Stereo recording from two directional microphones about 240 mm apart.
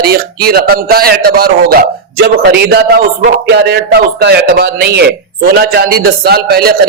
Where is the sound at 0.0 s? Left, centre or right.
Right.